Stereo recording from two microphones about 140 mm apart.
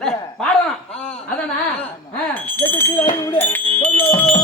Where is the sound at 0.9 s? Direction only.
10° left (ahead or behind).